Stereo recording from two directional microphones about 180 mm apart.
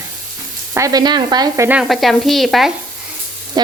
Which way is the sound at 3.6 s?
25° right (ahead or behind).